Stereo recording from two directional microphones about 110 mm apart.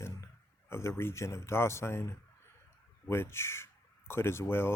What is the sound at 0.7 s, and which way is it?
Speech, 25° left (ahead or behind).